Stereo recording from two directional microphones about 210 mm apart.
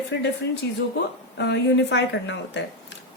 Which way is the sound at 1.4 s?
55° left (ahead or behind).